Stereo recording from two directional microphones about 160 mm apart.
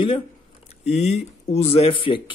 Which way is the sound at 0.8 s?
45° left (ahead or behind).